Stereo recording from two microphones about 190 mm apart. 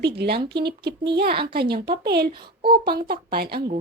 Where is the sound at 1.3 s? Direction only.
25° right (ahead or behind).